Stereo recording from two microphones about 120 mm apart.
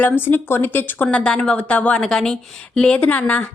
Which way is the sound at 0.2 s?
15° left (ahead or behind).